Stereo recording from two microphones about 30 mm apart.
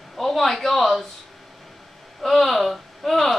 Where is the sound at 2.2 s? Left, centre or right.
Centre.